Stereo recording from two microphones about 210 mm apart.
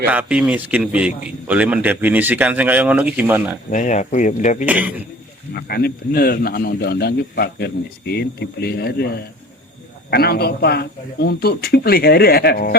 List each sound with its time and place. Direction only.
0.1 s a man's voice: 5° right (ahead or behind)
3.7 s speech: 35° left (ahead or behind)
4.6 s a man's voice: 5° right (ahead or behind)
5.5 s a man's voice: 50° left (ahead or behind)